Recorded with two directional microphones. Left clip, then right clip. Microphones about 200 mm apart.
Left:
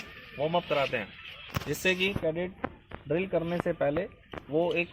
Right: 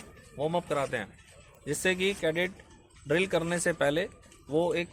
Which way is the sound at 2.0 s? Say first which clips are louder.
Right 1 dB; 15° right (ahead or behind).